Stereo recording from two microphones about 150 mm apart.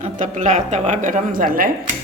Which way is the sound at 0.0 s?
50° right (ahead or behind).